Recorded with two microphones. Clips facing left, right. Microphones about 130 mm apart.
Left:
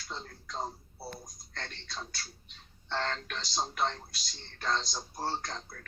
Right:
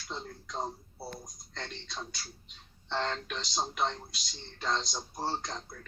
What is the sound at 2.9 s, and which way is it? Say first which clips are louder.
Music: right 1 dB; 10° right (ahead or behind).